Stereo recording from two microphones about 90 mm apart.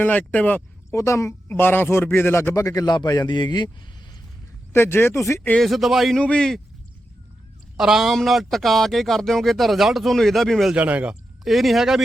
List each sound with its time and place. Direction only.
0.0 s speech: 15° left (ahead or behind)
0.9 s a woman's voice: 30° left (ahead or behind)
2.6 s a man's voice: 45° left (ahead or behind)
4.7 s a man's voice: 25° left (ahead or behind)
5.5 s speech: centre (ahead or behind)
6.1 s speech: 10° left (ahead or behind)
7.8 s speech: 5° right (ahead or behind)
10.8 s speech: 15° right (ahead or behind)
11.4 s speech: centre (ahead or behind)